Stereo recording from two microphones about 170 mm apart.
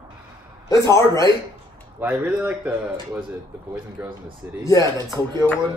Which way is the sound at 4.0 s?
10° right (ahead or behind).